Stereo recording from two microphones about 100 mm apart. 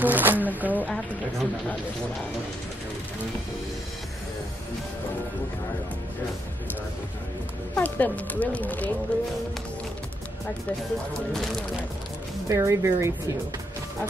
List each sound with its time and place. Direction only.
0.0 s speech: 20° right (ahead or behind)
0.7 s speech: 10° left (ahead or behind)
7.7 s speech: 15° left (ahead or behind)
11.3 s speech: 5° left (ahead or behind)
12.4 s speech: 30° right (ahead or behind)